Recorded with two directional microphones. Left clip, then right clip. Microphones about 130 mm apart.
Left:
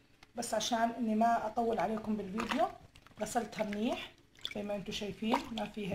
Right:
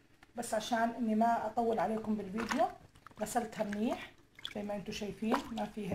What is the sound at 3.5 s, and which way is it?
Speech, 35° left (ahead or behind).